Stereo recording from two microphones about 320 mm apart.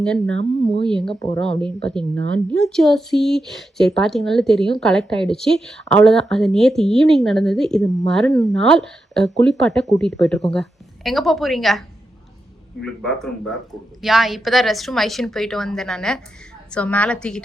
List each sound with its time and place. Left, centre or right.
0.0 s speech: centre
2.1 s a woman's voice: right
2.5 s speech: centre
12.8 s speech: centre